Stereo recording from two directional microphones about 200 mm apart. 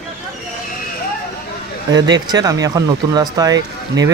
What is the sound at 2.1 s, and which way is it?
Speech, 20° right (ahead or behind).